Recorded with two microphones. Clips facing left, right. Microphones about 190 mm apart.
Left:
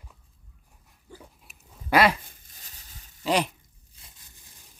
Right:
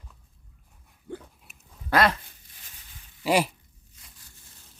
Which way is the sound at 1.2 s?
Centre (ahead or behind).